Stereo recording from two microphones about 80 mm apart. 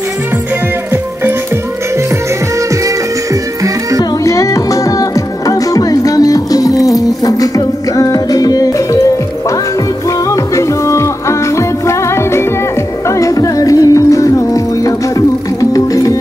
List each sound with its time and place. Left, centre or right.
4.2 s music: left
10.3 s music: left